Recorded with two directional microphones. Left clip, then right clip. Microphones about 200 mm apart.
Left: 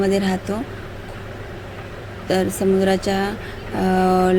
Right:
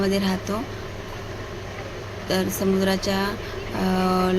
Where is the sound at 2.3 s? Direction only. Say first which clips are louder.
Left 5 dB; 15° left (ahead or behind).